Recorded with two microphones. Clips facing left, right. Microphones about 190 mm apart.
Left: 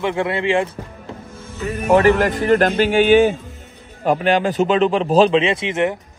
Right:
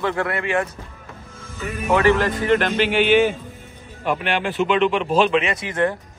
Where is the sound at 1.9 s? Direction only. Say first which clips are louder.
Left 3 dB; 40° left (ahead or behind); by 5.9 s 25° left (ahead or behind).